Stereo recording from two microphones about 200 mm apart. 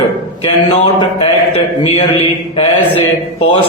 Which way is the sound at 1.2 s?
30° left (ahead or behind).